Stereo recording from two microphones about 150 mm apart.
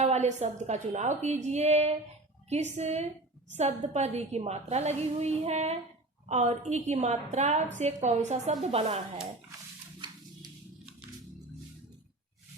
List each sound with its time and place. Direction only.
0.0 s a woman's voice: 50° right (ahead or behind)